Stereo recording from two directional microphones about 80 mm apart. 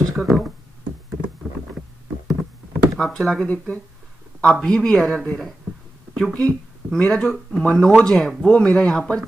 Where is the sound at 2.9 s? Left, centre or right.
Centre.